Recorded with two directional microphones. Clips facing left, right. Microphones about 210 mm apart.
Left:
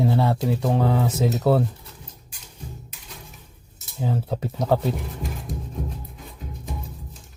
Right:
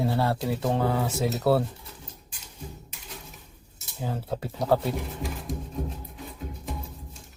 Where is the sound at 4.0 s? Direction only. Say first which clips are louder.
Left 5 dB; 20° left (ahead or behind).